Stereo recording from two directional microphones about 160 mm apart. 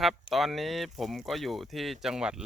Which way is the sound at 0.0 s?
Centre (ahead or behind).